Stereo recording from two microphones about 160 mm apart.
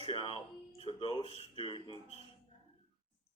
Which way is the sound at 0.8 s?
35° left (ahead or behind).